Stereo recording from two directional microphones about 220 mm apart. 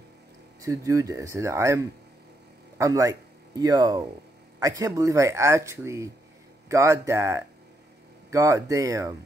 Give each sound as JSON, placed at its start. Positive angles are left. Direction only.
{"t": 0.6, "sound": "speech", "side_deg": -15}